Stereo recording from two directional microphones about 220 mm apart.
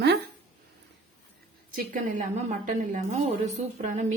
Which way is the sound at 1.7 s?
35° right (ahead or behind).